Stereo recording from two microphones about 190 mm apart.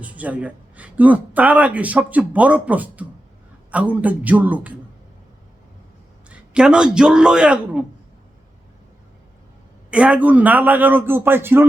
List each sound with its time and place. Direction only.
0.0 s speech: 5° right (ahead or behind)
6.3 s a man's voice: 5° right (ahead or behind)
9.9 s speech: 5° right (ahead or behind)